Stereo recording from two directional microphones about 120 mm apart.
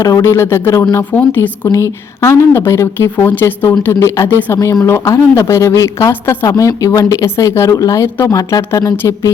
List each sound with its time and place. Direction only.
0.0 s a woman's voice: 25° left (ahead or behind)